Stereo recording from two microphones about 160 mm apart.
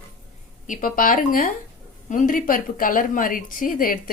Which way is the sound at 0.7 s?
55° left (ahead or behind).